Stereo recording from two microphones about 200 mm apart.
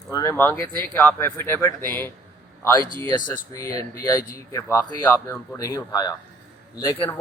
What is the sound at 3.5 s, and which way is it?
Speech, 15° left (ahead or behind).